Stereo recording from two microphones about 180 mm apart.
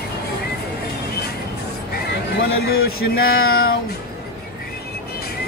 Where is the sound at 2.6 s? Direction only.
60° left (ahead or behind).